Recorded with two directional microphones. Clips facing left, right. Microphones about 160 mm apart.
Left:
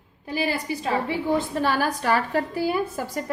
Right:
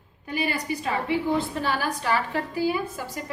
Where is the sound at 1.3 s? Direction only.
45° left (ahead or behind).